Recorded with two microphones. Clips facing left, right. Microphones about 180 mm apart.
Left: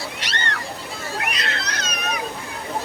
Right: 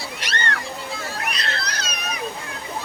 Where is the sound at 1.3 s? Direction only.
35° right (ahead or behind).